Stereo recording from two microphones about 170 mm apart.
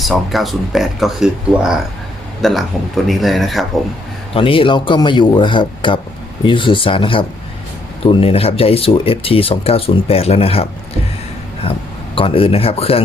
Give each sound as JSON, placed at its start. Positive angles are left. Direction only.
{"t": 0.0, "sound": "speech", "side_deg": 0}
{"t": 4.4, "sound": "a man's voice", "side_deg": 30}
{"t": 12.1, "sound": "speech", "side_deg": 30}